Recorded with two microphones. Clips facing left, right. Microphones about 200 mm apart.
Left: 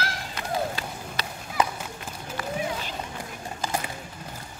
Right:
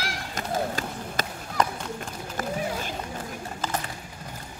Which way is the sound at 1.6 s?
5° left (ahead or behind).